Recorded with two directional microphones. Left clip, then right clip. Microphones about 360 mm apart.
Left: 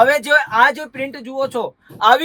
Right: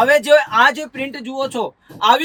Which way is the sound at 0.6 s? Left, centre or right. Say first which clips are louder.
Even; centre.